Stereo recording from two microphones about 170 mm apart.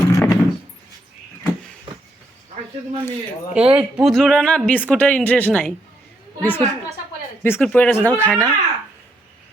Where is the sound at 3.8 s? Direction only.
5° right (ahead or behind).